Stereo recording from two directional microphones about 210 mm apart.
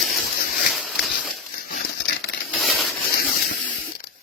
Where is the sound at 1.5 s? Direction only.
45° left (ahead or behind).